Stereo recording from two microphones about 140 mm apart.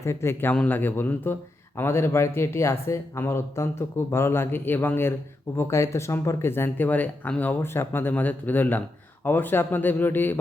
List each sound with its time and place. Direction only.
0.0 s speech: 20° left (ahead or behind)